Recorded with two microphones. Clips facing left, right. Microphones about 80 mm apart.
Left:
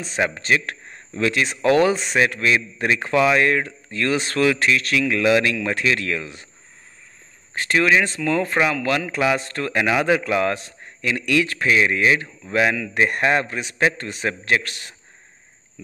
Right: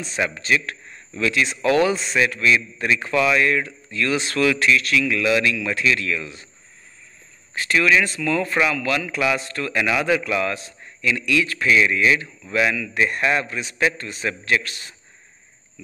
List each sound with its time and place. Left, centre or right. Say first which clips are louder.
0.2 s a man's voice: left 1 dB; left
1.7 s a man's voice: left 2 dB; left
7.5 s a man's voice: left 1 dB; left
9.4 s a man's voice: left 1 dB; left
14.6 s speech: left 1 dB; left